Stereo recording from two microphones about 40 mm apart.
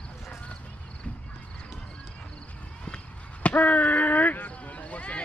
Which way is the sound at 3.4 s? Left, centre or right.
Left.